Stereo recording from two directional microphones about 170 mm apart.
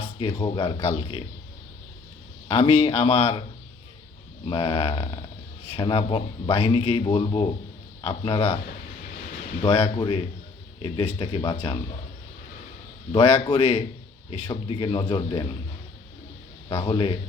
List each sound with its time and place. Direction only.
0.0 s a man's voice: 30° left (ahead or behind)
2.5 s a man's voice: 30° left (ahead or behind)
4.4 s a man's voice: 35° left (ahead or behind)
9.6 s a man's voice: 35° left (ahead or behind)
13.1 s a man's voice: 30° left (ahead or behind)
16.6 s a man's voice: 30° left (ahead or behind)